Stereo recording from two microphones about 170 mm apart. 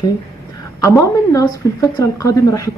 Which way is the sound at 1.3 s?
20° left (ahead or behind).